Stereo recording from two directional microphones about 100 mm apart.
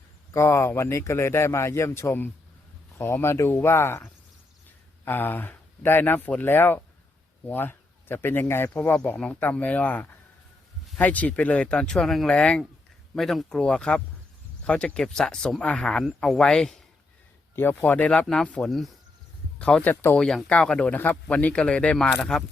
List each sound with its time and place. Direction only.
0.3 s speech: 25° left (ahead or behind); by 16.8 s 5° left (ahead or behind)
17.5 s speech: 20° left (ahead or behind)
20.1 s speech: 5° left (ahead or behind)